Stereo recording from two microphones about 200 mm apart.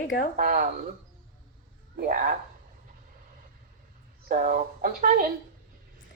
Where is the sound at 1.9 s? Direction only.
45° right (ahead or behind).